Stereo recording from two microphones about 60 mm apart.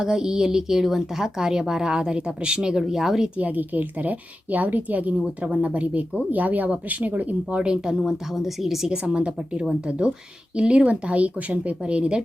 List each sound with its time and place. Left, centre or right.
0.0 s speech: centre
3.3 s a woman's voice: right
7.5 s speech: centre
8.9 s a woman's voice: centre